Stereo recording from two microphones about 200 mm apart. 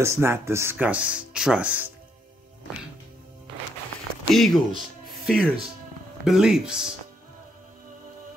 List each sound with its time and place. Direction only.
0.0 s speech: 15° right (ahead or behind)
4.3 s speech: centre (ahead or behind)